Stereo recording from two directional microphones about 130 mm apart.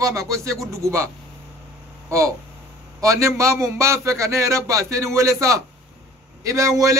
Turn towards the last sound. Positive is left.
turn(degrees=-25)  # may be behind; listen again after turning